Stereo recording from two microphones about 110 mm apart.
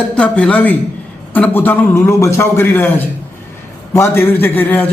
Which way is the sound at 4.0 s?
20° left (ahead or behind).